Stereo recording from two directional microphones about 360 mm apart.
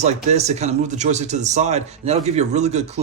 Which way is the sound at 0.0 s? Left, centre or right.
Centre.